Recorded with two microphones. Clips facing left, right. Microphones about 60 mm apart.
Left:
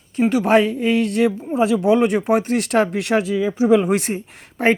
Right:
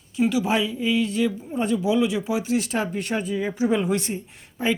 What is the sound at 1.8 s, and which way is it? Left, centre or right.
Speech, left.